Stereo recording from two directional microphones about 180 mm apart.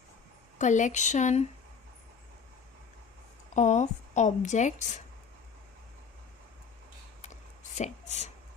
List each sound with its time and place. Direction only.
0.6 s a woman's voice: 45° left (ahead or behind)
3.5 s a woman's voice: 40° left (ahead or behind)
7.8 s a woman's voice: 40° left (ahead or behind)